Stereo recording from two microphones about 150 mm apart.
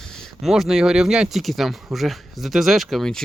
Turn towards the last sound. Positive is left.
turn(degrees=5)  # may be behind; listen again after turning